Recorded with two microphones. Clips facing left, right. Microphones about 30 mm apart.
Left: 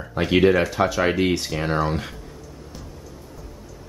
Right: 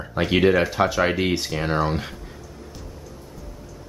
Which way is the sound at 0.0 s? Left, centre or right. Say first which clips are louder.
Left 1 dB; centre.